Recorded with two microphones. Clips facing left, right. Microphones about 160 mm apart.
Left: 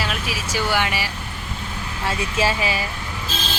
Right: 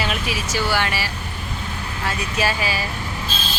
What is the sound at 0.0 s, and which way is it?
Vehicle, centre (ahead or behind).